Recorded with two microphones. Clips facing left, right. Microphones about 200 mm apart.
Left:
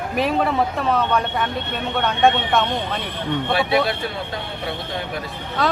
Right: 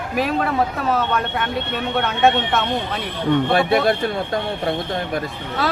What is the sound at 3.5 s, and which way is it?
Speech, 50° right (ahead or behind).